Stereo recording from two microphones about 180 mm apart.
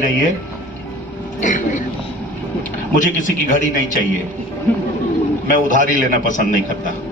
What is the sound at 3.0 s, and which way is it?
A man's voice, 45° left (ahead or behind).